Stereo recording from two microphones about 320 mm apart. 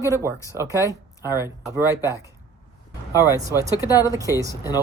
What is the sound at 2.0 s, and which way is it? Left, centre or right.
Speech, centre.